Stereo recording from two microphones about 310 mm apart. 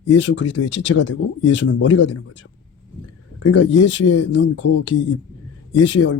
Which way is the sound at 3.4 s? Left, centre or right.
Left.